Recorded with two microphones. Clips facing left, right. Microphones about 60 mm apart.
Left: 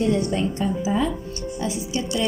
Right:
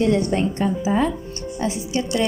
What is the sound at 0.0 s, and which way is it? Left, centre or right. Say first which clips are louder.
A woman's voice: right 3 dB; right.